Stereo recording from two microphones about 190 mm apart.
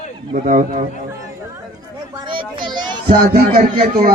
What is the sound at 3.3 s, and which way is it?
Speech, 55° right (ahead or behind).